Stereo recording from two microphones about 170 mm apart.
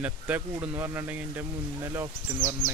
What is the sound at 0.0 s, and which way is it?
Speech, 10° right (ahead or behind).